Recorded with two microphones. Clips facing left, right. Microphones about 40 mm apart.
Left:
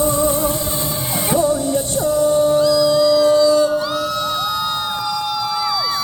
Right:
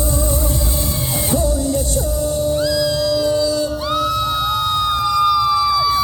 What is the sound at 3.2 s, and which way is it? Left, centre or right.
Music, left.